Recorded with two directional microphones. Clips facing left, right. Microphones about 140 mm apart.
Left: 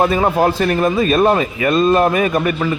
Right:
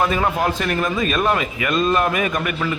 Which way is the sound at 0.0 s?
30° left (ahead or behind).